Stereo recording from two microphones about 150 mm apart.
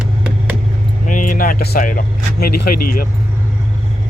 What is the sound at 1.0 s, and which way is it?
Speech, 60° left (ahead or behind).